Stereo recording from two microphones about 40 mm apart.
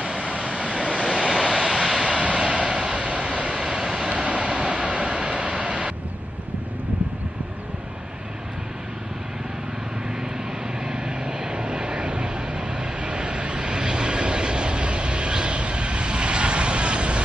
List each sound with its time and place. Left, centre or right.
0.0 s vehicle: right; by 2.0 s centre
2.0 s vehicle: right
3.6 s vehicle: centre
10.9 s vehicle: right